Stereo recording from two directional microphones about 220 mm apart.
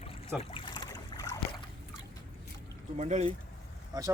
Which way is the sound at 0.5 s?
20° left (ahead or behind).